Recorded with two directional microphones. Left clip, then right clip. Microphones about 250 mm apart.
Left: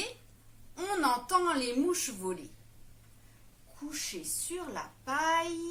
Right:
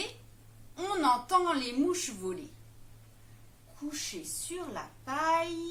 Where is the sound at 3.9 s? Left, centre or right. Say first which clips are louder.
Left 1 dB; centre.